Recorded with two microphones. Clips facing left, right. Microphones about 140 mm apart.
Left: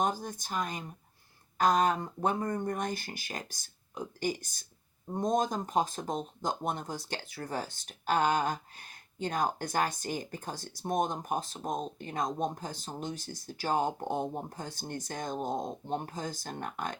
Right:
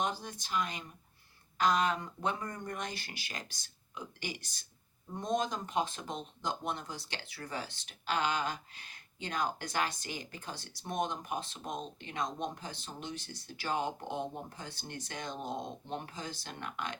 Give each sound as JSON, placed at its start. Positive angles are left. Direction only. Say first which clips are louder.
{"t": 0.0, "sound": "speech", "louder": "left 4 dB", "side_deg": 45}